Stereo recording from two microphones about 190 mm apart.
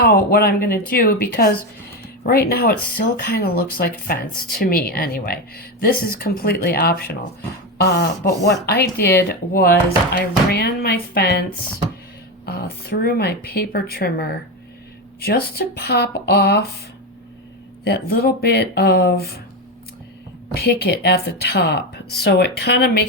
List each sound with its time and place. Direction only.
0.0 s speech: 55° left (ahead or behind)
17.8 s speech: 55° left (ahead or behind)
20.5 s speech: 55° left (ahead or behind)